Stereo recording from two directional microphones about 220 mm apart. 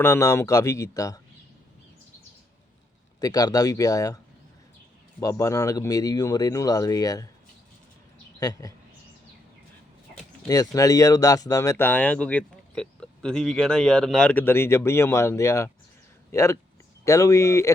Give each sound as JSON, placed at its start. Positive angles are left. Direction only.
{"t": 0.0, "sound": "speech", "side_deg": 15}
{"t": 3.2, "sound": "speech", "side_deg": 15}
{"t": 5.2, "sound": "speech", "side_deg": 15}
{"t": 8.4, "sound": "speech", "side_deg": 15}
{"t": 10.2, "sound": "speech", "side_deg": 15}